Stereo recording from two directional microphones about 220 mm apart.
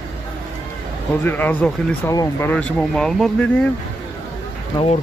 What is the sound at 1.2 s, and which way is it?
Speech, 10° left (ahead or behind).